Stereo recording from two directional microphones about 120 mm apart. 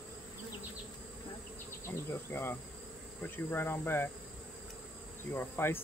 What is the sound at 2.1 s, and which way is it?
Insect, 20° left (ahead or behind).